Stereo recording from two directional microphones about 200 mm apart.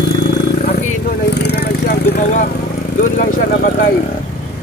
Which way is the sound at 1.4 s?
55° left (ahead or behind).